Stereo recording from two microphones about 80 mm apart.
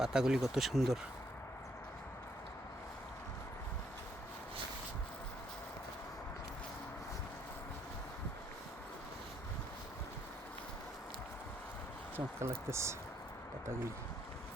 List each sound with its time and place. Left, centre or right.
0.0 s speech: centre
12.1 s speech: right